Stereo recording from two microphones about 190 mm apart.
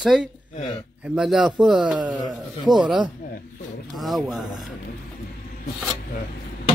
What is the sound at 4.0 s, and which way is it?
Speech, centre (ahead or behind).